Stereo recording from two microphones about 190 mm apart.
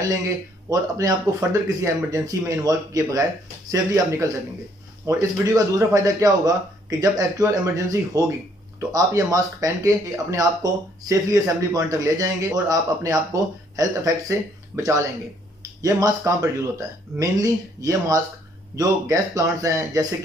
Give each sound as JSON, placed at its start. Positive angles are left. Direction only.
{"t": 0.7, "sound": "a man's voice", "side_deg": -15}